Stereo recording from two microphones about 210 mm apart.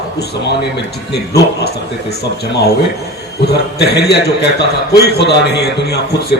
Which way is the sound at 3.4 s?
50° left (ahead or behind).